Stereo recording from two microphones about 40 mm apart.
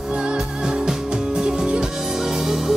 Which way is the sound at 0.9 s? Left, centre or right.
Centre.